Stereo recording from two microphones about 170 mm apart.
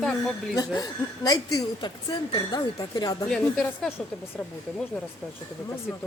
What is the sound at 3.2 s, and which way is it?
Speech, 5° left (ahead or behind).